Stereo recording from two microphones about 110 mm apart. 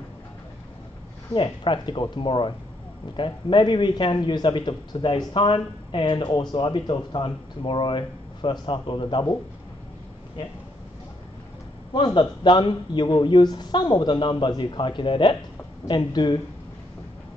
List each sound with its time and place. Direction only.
1.3 s a man's voice: 50° left (ahead or behind)
11.9 s a man's voice: 45° left (ahead or behind)